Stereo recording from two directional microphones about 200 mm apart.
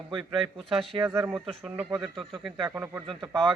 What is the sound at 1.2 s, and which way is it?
Speech, centre (ahead or behind).